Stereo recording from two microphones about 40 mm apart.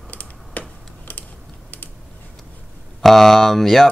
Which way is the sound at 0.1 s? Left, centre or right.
Left.